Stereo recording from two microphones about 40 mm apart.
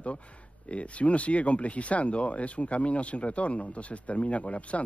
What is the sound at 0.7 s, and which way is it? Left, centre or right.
Speech, left.